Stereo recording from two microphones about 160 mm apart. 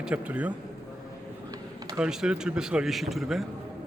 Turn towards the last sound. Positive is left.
turn(degrees=0)  # may be behind; listen again after turning